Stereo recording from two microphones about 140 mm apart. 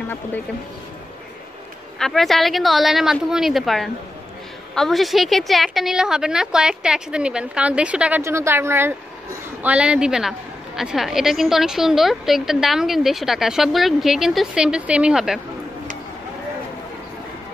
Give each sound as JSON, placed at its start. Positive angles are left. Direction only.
{"t": 2.0, "sound": "a woman's voice", "side_deg": 5}
{"t": 8.2, "sound": "a woman's voice", "side_deg": -20}